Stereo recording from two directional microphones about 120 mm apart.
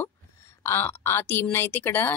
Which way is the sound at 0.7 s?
20° left (ahead or behind).